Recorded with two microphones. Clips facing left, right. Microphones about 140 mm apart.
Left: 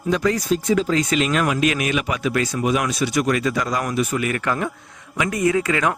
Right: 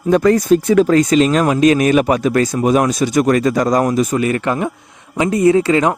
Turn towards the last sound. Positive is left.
turn(degrees=-30)  # may be behind; listen again after turning